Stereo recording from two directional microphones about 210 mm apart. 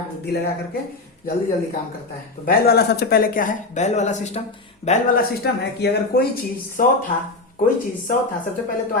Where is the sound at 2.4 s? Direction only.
50° left (ahead or behind); by 5.2 s 35° left (ahead or behind).